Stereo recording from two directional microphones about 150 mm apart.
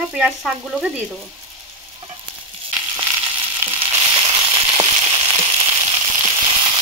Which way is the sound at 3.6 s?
35° right (ahead or behind).